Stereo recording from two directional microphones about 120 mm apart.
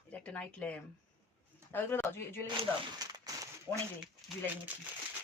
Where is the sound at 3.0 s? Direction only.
30° right (ahead or behind).